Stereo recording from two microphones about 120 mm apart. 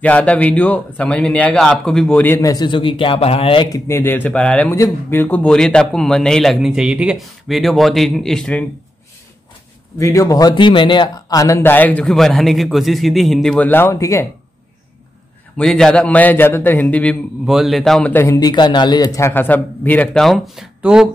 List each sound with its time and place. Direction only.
0.0 s a man's voice: 10° left (ahead or behind)
2.2 s a man's voice: 25° left (ahead or behind); by 3.6 s 55° left (ahead or behind)
3.7 s a man's voice: 25° left (ahead or behind); by 8.6 s 5° left (ahead or behind)
9.9 s a man's voice: 25° left (ahead or behind)
10.5 s speech: 45° left (ahead or behind); by 11.7 s 25° left (ahead or behind)
11.7 s a man's voice: 15° left (ahead or behind)
13.7 s a man's voice: 20° left (ahead or behind)
15.5 s a man's voice: 5° left (ahead or behind)
17.5 s a man's voice: centre (ahead or behind)
18.1 s a man's voice: 20° left (ahead or behind)
18.4 s a man's voice: 40° left (ahead or behind); by 20.1 s 15° left (ahead or behind)
20.2 s a man's voice: centre (ahead or behind)